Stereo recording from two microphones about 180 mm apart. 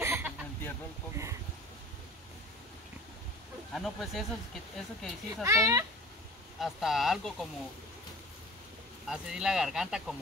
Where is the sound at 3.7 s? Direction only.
Centre (ahead or behind).